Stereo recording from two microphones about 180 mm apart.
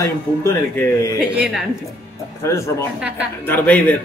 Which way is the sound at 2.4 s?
15° left (ahead or behind).